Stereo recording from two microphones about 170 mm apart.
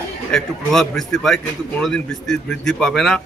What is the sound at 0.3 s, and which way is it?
Speech, 5° left (ahead or behind).